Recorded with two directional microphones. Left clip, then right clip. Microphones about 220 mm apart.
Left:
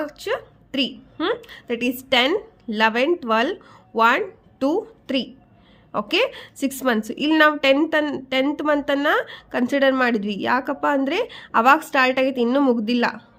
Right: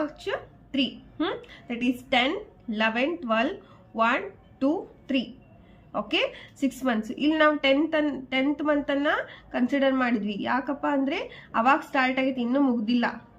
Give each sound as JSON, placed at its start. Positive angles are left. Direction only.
{"t": 0.0, "sound": "a woman's voice", "side_deg": 55}